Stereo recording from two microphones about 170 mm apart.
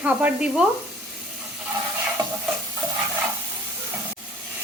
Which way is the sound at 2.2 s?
25° right (ahead or behind).